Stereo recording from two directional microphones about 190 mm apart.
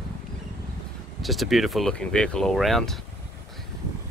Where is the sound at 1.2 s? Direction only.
Centre (ahead or behind).